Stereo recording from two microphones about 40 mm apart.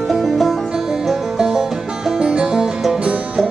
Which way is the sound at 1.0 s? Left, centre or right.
Centre.